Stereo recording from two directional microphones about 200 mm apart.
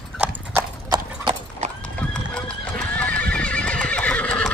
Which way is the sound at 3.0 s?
5° left (ahead or behind).